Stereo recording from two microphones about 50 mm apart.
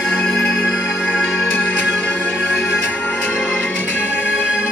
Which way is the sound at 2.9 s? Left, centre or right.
Left.